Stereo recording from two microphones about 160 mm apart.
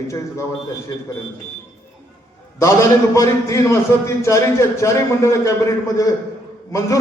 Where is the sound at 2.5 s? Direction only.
20° left (ahead or behind).